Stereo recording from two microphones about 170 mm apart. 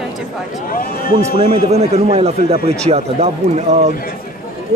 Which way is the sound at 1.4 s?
35° right (ahead or behind).